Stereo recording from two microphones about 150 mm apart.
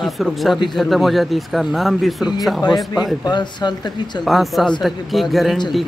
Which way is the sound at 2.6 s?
25° left (ahead or behind).